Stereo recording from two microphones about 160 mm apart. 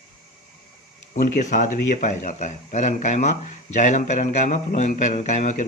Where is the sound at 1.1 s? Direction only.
55° left (ahead or behind).